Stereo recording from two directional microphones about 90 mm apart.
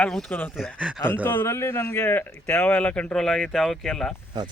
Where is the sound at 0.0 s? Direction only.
5° left (ahead or behind).